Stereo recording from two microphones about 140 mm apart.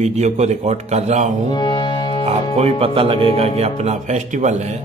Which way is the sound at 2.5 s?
45° right (ahead or behind).